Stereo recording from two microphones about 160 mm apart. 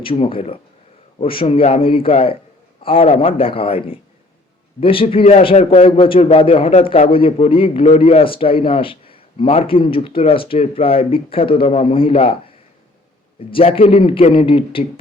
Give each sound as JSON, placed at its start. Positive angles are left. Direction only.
{"t": 0.0, "sound": "a man's voice", "side_deg": 35}
{"t": 13.5, "sound": "a man's voice", "side_deg": 35}